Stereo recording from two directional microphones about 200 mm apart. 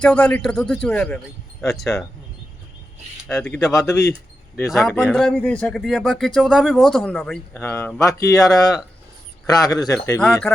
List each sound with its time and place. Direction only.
0.0 s speech: 5° left (ahead or behind)
3.2 s speech: 5° left (ahead or behind)
7.6 s speech: 10° left (ahead or behind)